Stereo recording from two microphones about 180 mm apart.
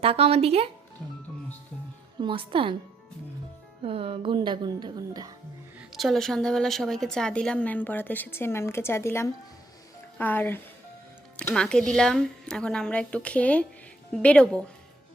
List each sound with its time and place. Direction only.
0.0 s speech: 35° right (ahead or behind)
2.2 s speech: 30° right (ahead or behind)
3.8 s speech: 30° right (ahead or behind)
5.9 s a woman's voice: centre (ahead or behind)